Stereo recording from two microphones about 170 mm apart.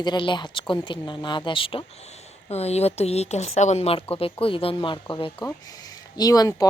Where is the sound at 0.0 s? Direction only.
25° left (ahead or behind).